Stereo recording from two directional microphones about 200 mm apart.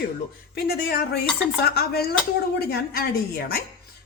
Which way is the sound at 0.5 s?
50° left (ahead or behind).